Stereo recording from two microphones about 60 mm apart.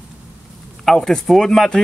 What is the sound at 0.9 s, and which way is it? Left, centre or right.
Speech, centre.